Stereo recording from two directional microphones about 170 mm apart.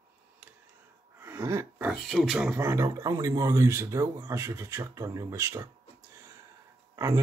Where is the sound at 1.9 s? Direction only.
Centre (ahead or behind); by 5.7 s 15° right (ahead or behind).